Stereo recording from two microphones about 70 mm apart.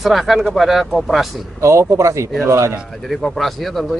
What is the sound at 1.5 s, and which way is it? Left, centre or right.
Speech, right.